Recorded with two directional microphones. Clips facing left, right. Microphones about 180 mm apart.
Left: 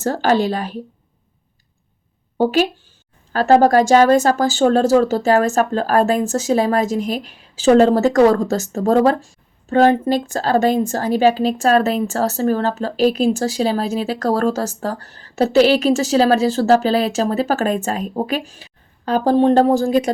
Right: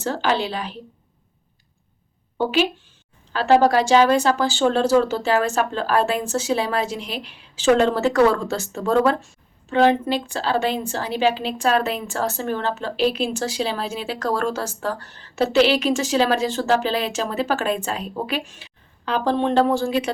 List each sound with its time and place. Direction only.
0.0 s a woman's voice: 45° left (ahead or behind)
2.4 s speech: 40° left (ahead or behind)